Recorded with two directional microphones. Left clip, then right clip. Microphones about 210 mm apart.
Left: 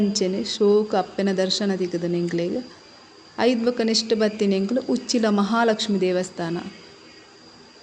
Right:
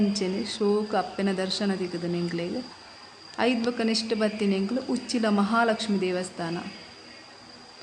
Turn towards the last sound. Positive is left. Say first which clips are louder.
# left 5 dB
turn(degrees=15)  # may be behind; listen again after turning